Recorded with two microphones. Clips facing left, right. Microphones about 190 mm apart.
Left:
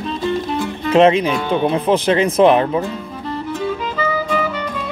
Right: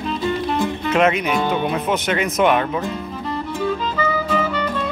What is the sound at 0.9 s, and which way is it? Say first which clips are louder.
Speech: left 6 dB; 30° left (ahead or behind).